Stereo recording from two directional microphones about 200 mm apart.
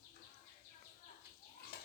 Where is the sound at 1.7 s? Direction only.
55° left (ahead or behind).